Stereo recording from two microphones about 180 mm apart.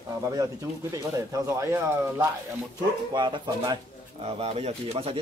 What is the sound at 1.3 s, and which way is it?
Speech, 15° right (ahead or behind).